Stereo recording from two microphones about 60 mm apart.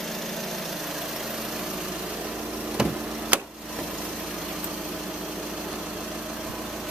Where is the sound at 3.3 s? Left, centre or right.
Right.